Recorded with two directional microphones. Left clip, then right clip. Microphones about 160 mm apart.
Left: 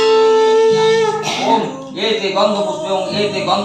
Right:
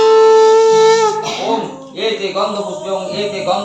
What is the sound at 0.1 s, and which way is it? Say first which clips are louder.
Music: right 4 dB; 30° right (ahead or behind).